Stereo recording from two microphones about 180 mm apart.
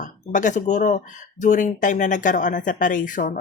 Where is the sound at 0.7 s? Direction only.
45° left (ahead or behind).